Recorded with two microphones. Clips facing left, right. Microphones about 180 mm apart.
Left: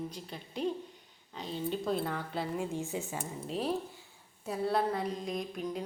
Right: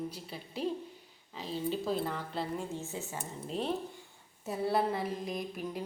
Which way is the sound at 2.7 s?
15° left (ahead or behind).